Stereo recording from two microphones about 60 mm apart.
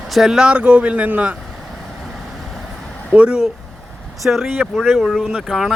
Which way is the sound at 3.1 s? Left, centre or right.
Centre.